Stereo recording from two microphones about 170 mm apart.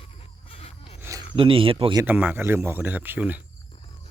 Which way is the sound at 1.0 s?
20° right (ahead or behind).